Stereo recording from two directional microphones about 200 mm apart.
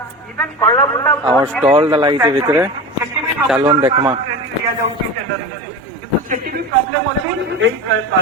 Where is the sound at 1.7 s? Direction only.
25° right (ahead or behind).